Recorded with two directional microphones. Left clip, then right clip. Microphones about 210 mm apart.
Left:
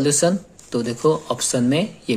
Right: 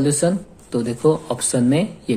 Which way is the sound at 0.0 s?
30° left (ahead or behind).